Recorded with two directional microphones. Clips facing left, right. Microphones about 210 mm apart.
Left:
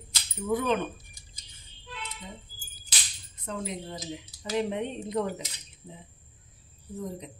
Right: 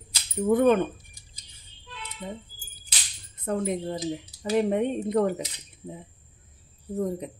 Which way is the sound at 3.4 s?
55° right (ahead or behind).